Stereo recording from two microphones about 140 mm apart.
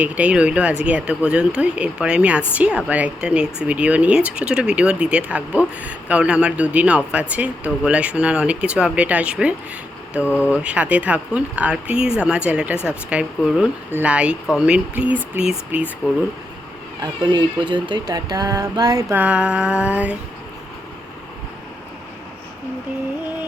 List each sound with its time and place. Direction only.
0.0 s speech: 10° right (ahead or behind)
17.0 s speech: 30° right (ahead or behind)
19.1 s speech: 10° right (ahead or behind)